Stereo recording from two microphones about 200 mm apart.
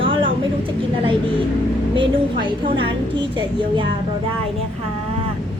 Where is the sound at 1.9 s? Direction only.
25° right (ahead or behind).